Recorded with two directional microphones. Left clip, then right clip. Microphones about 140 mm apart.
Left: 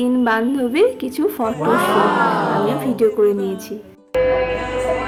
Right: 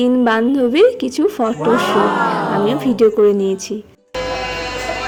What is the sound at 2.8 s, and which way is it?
Speech, 35° right (ahead or behind).